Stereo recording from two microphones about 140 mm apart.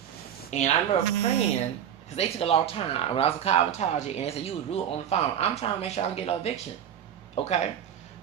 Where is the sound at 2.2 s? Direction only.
45° left (ahead or behind).